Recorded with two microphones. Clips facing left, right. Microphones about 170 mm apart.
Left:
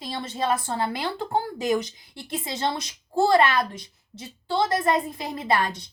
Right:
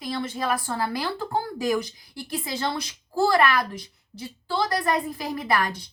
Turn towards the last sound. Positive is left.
turn(degrees=25)  # may be behind; listen again after turning